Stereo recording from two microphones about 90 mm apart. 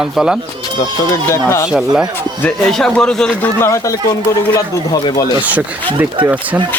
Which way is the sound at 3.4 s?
30° left (ahead or behind).